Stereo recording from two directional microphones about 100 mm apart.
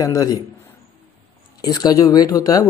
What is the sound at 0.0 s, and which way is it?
Speech, 35° left (ahead or behind).